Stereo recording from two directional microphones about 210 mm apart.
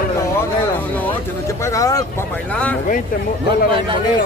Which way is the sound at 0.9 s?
15° left (ahead or behind).